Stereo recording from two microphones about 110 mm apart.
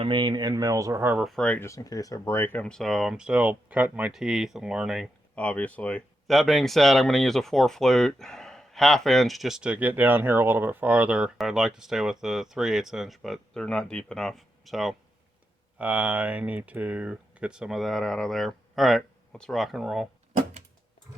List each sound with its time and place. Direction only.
0.0 s speech: 45° right (ahead or behind); by 1.1 s 25° right (ahead or behind)
1.1 s speech: centre (ahead or behind)
1.5 s speech: 20° left (ahead or behind); by 4.1 s 15° right (ahead or behind)
4.1 s speech: 5° right (ahead or behind)
5.3 s speech: 10° left (ahead or behind)
6.2 s speech: centre (ahead or behind)
15.8 s speech: 10° right (ahead or behind)